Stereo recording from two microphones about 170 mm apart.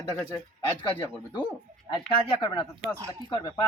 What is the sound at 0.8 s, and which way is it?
Speech, 25° left (ahead or behind).